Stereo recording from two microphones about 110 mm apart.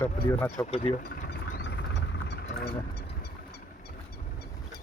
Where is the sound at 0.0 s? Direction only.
20° left (ahead or behind).